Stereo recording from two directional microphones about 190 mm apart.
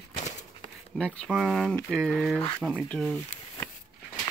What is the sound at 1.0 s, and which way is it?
Speech, 5° left (ahead or behind).